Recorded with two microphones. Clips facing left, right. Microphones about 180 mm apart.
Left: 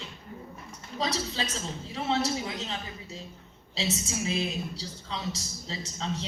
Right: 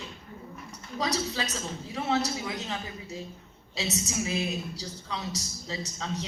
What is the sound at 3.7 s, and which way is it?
A woman's voice, 30° left (ahead or behind).